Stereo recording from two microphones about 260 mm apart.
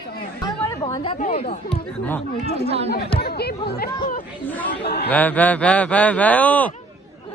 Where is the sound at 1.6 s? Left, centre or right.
Centre.